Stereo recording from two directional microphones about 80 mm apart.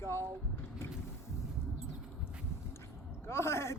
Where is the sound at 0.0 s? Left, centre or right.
Left.